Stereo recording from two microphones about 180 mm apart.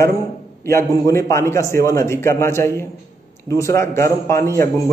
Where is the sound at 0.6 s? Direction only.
15° left (ahead or behind).